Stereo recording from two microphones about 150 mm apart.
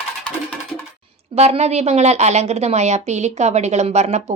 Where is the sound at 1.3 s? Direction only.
45° right (ahead or behind).